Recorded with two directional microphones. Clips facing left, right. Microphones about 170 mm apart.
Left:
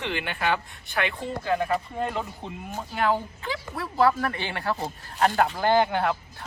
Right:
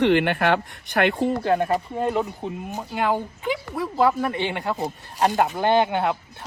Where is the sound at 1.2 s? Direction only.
45° right (ahead or behind).